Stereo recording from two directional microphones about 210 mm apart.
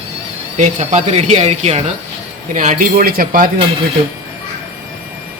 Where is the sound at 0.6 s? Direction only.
35° right (ahead or behind).